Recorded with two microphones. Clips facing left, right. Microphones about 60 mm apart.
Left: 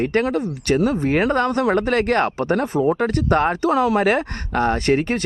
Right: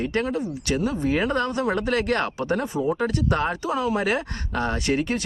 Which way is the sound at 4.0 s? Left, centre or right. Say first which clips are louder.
Left 6 dB; left.